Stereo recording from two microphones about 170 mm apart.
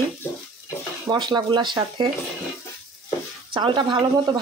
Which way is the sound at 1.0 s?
25° right (ahead or behind).